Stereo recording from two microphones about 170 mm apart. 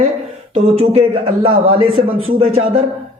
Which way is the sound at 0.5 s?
35° right (ahead or behind).